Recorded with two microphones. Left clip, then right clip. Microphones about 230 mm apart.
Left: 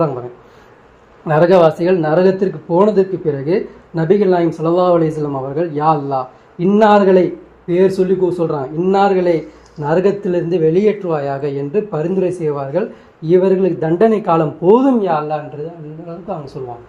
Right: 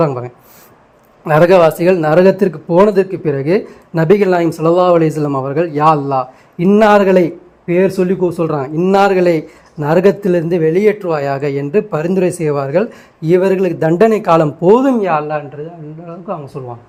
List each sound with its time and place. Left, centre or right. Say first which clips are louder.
1.2 s speech: right 2 dB; right
16.6 s speech: even; right